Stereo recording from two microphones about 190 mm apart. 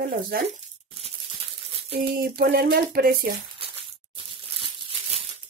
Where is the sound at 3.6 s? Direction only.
30° right (ahead or behind).